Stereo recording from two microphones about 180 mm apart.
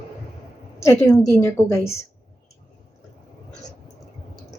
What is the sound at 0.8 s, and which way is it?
A woman's voice, 15° left (ahead or behind).